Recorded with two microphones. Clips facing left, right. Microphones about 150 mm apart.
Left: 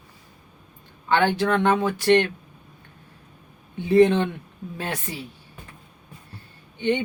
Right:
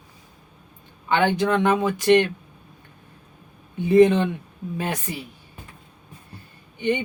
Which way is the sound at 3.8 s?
15° right (ahead or behind).